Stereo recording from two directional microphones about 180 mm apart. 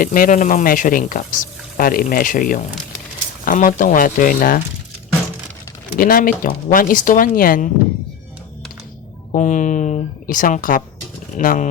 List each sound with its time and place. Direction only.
0.0 s speech: 50° left (ahead or behind)
6.0 s speech: 50° left (ahead or behind)
9.3 s speech: 45° left (ahead or behind)